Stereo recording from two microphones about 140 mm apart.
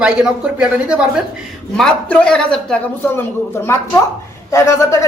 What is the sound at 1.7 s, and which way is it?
A man's voice, 5° left (ahead or behind).